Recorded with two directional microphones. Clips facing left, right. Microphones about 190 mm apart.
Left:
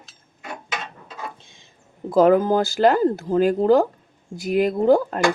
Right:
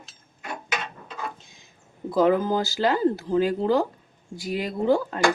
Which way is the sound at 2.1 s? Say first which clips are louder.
Left 5 dB; 45° left (ahead or behind).